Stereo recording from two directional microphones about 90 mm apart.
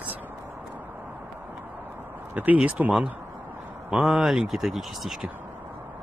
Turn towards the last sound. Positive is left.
turn(degrees=0)  # may be behind; listen again after turning